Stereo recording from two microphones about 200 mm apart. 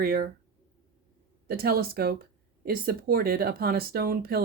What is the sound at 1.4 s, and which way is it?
Speech, 50° right (ahead or behind).